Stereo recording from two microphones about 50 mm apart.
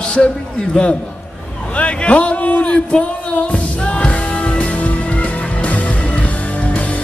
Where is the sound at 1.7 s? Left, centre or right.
Left.